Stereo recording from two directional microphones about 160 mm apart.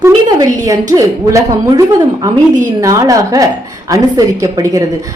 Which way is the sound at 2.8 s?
20° right (ahead or behind).